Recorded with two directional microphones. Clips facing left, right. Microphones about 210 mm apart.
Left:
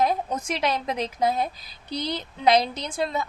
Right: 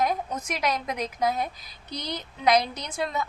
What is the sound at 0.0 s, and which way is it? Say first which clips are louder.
A woman's voice: left 3 dB; 30° left (ahead or behind).